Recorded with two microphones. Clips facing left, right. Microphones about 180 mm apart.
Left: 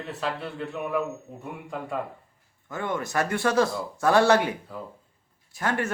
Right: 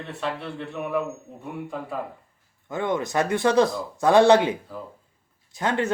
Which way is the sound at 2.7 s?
20° right (ahead or behind).